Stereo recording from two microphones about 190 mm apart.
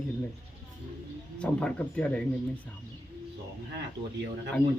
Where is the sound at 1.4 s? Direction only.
5° left (ahead or behind).